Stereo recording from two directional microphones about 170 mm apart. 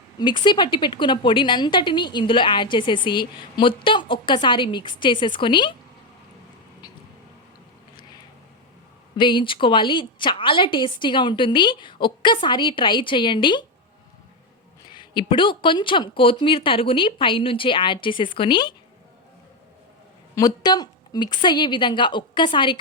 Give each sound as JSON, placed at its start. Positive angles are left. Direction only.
{"t": 0.2, "sound": "a woman's voice", "side_deg": 25}
{"t": 9.1, "sound": "a woman's voice", "side_deg": 30}
{"t": 14.8, "sound": "a woman's voice", "side_deg": 25}
{"t": 20.3, "sound": "a woman's voice", "side_deg": 25}